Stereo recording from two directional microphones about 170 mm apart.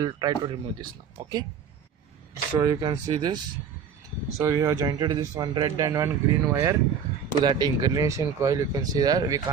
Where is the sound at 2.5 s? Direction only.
25° right (ahead or behind).